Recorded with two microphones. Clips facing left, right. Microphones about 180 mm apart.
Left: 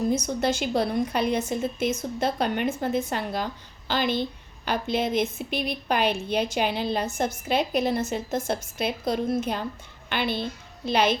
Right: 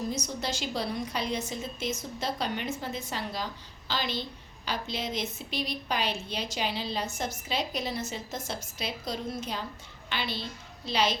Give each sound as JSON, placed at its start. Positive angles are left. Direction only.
{"t": 0.1, "sound": "a woman's voice", "side_deg": 55}